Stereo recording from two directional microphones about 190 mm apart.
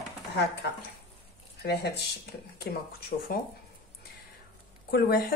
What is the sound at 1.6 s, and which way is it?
Speech, 60° left (ahead or behind).